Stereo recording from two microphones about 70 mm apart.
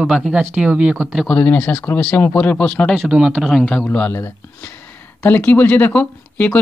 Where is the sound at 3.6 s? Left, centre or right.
Centre.